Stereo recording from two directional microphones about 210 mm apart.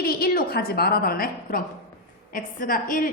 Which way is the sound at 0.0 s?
45° left (ahead or behind).